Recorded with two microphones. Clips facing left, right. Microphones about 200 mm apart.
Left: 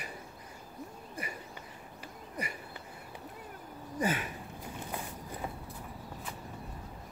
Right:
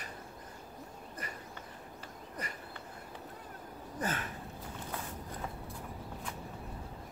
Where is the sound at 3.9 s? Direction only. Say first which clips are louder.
Left 5 dB; 10° left (ahead or behind).